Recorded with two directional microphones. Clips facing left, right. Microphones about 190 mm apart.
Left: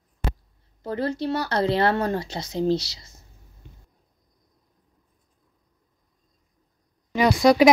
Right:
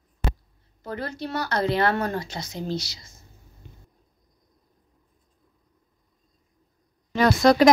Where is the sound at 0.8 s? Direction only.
30° left (ahead or behind).